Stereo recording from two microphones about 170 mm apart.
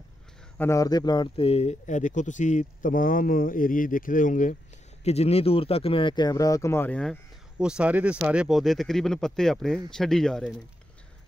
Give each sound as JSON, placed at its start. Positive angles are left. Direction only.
{"t": 0.6, "sound": "speech", "side_deg": 20}
{"t": 5.0, "sound": "speech", "side_deg": 40}